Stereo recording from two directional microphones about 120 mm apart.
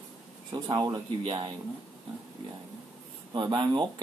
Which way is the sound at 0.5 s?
35° right (ahead or behind).